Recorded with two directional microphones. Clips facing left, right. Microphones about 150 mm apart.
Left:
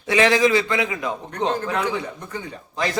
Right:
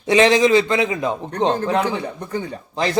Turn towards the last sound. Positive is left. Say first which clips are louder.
# right 5 dB
turn(degrees=-30)  # may be behind; listen again after turning